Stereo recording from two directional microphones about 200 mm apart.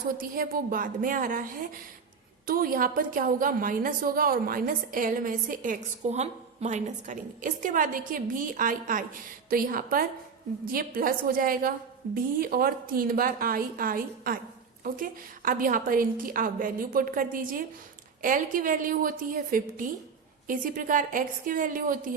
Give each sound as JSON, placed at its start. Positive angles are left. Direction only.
{"t": 0.2, "sound": "a woman's voice", "side_deg": -45}
{"t": 2.5, "sound": "a woman's voice", "side_deg": -45}